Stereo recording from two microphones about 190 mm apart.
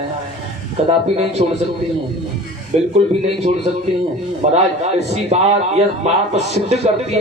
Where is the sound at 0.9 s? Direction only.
35° right (ahead or behind).